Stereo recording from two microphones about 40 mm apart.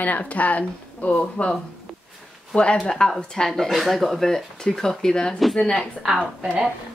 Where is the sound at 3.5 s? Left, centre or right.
Centre.